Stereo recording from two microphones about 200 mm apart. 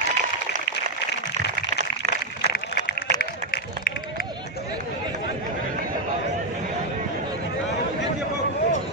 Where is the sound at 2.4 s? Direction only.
50° left (ahead or behind).